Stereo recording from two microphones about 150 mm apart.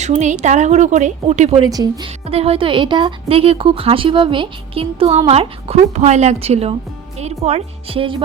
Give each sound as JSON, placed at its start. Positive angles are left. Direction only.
{"t": 0.0, "sound": "a woman's voice", "side_deg": -50}
{"t": 1.6, "sound": "a woman's voice", "side_deg": -25}
{"t": 2.2, "sound": "a woman's voice", "side_deg": -40}